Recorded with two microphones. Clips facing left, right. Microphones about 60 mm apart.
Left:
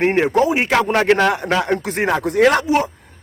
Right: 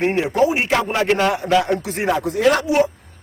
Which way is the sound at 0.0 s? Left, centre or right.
Left.